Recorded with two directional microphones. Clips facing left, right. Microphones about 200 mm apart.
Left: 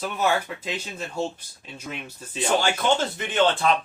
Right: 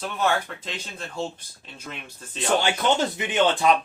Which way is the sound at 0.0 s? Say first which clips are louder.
Left 1 dB; 5° left (ahead or behind).